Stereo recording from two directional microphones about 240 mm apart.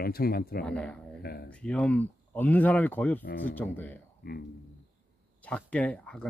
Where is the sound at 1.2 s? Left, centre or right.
Left.